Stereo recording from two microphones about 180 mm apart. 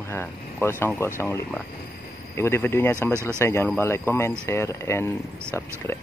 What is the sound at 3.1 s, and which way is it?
Speech, 15° right (ahead or behind).